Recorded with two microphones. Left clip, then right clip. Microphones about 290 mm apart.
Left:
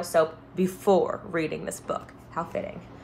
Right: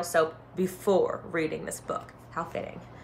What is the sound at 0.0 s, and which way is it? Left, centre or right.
Speech, centre.